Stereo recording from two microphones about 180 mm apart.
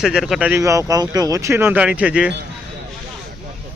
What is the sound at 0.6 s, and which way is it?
Speech, 15° right (ahead or behind).